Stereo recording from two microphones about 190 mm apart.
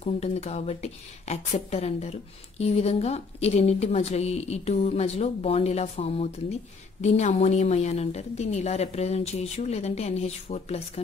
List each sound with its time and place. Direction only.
0.0 s a woman's voice: 35° left (ahead or behind)